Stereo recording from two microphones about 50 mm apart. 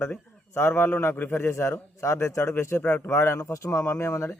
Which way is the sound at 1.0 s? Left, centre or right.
Left.